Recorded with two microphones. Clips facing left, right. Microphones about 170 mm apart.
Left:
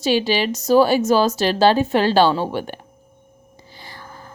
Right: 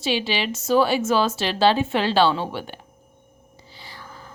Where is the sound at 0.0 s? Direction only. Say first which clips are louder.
Left 6 dB; 40° left (ahead or behind).